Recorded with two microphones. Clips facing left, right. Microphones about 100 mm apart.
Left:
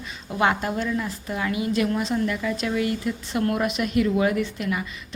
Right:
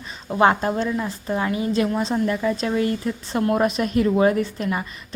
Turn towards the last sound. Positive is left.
turn(degrees=-35)  # may be behind; listen again after turning